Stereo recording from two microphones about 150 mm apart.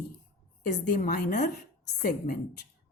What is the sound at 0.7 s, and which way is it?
A woman's voice, 60° left (ahead or behind).